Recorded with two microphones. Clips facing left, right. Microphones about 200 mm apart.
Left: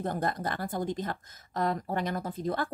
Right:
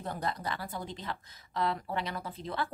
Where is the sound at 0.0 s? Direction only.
50° left (ahead or behind).